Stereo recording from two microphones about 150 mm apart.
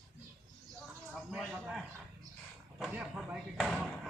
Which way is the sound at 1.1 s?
5° right (ahead or behind).